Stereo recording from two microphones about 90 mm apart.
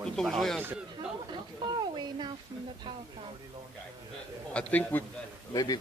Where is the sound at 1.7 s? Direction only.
55° right (ahead or behind).